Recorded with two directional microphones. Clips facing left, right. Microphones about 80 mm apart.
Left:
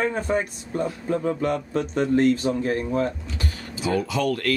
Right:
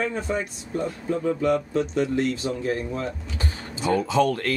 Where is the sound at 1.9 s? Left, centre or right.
Left.